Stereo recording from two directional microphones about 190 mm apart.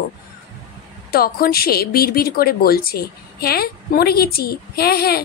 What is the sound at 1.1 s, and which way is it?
A woman's voice, 50° left (ahead or behind).